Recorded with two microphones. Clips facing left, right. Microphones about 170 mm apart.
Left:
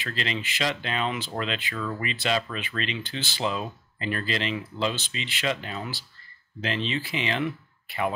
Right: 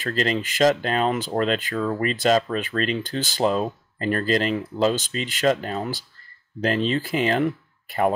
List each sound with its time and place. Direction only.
0.0 s speech: 45° right (ahead or behind)